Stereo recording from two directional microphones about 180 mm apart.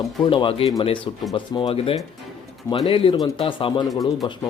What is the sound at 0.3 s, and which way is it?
Speech, 30° left (ahead or behind).